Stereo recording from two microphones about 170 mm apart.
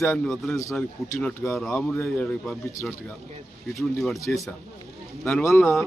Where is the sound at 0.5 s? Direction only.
15° left (ahead or behind).